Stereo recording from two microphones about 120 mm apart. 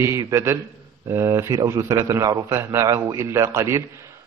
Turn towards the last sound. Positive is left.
turn(degrees=-25)  # may be behind; listen again after turning